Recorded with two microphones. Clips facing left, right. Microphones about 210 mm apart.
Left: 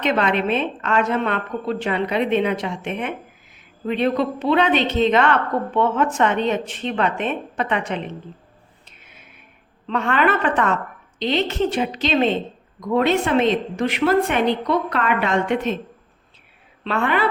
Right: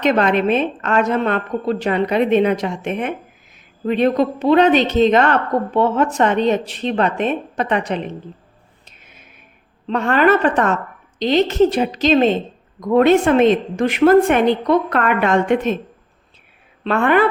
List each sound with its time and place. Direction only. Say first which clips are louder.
0.0 s a woman's voice: right 4 dB; 45° right (ahead or behind)
8.8 s music: right 1 dB; 40° right (ahead or behind)
9.8 s a woman's voice: right 4 dB; 40° right (ahead or behind)
16.8 s a woman's voice: right 6 dB; 50° right (ahead or behind)